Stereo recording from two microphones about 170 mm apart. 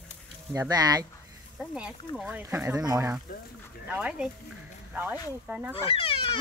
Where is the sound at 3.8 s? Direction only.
5° right (ahead or behind).